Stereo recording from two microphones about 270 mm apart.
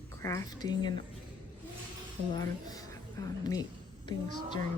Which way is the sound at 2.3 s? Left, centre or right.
Centre.